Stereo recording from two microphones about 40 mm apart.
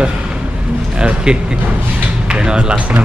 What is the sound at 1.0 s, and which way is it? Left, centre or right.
Speech, right.